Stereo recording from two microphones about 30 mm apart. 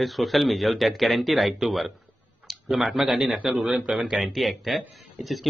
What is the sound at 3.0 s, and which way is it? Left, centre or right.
Speech, centre.